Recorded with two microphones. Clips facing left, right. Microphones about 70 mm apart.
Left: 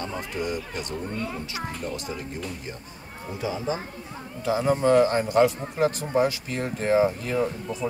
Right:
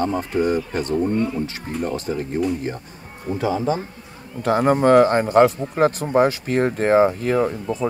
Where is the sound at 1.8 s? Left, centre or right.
Right.